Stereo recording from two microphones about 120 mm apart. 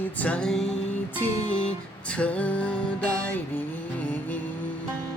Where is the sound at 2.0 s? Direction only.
10° left (ahead or behind).